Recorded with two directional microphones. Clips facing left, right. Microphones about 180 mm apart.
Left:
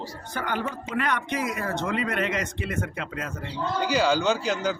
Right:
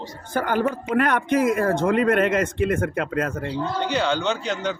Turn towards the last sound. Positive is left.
turn(degrees=5)  # may be behind; listen again after turning